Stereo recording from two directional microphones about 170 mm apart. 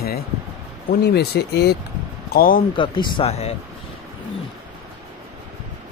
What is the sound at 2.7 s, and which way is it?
Speech, 30° left (ahead or behind).